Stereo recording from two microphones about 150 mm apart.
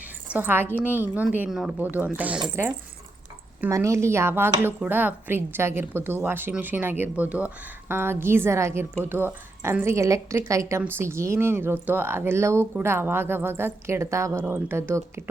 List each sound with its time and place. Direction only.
0.3 s a woman's voice: 10° right (ahead or behind)
3.6 s a woman's voice: 20° right (ahead or behind)